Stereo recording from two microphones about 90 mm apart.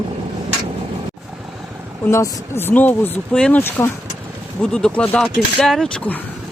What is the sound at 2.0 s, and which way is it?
Speech, 30° left (ahead or behind).